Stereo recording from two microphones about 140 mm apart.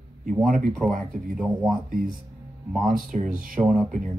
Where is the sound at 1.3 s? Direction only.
5° right (ahead or behind).